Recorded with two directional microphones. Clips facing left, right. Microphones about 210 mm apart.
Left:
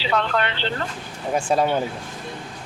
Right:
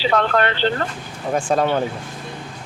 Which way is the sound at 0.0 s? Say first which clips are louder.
Right 4 dB; 45° right (ahead or behind).